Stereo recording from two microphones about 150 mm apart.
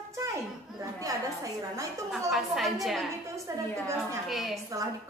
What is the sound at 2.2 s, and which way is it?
Speech, centre (ahead or behind).